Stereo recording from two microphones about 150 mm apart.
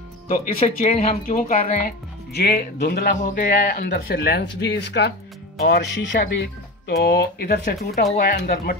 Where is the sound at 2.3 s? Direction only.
90° left.